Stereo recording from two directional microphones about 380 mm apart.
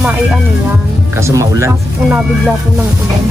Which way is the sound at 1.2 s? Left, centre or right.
Centre.